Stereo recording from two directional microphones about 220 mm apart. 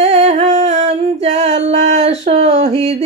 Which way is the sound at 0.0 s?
30° right (ahead or behind).